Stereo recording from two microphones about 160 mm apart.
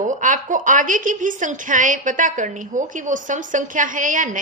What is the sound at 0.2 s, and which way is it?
A woman's voice, 55° right (ahead or behind).